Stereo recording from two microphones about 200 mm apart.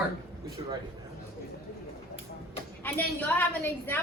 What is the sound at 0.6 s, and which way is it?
Speech, 25° right (ahead or behind).